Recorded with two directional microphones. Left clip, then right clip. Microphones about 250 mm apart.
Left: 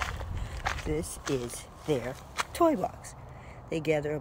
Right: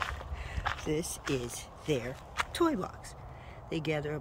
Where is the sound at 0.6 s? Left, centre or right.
Left.